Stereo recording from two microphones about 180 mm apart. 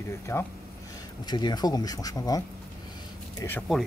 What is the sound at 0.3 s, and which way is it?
Speech, 15° left (ahead or behind).